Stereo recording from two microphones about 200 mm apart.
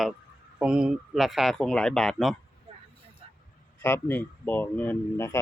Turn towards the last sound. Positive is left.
turn(degrees=10)  # may be behind; listen again after turning